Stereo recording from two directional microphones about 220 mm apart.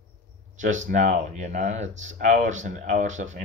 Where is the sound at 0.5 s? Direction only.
35° right (ahead or behind).